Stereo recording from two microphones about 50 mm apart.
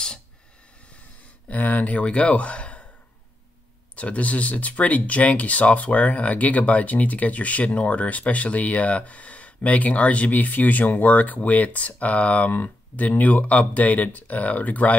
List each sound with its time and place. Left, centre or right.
1.5 s speech: left
3.9 s speech: left